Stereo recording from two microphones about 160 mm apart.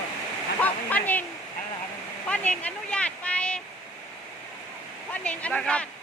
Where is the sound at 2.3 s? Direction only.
10° left (ahead or behind).